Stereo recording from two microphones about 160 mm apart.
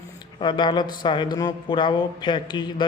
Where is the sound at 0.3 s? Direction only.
30° left (ahead or behind).